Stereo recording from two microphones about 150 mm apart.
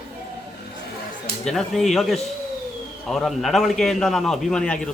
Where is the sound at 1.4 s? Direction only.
Centre (ahead or behind).